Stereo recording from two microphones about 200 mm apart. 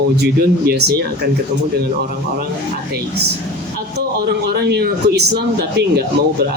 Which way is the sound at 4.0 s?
55° right (ahead or behind).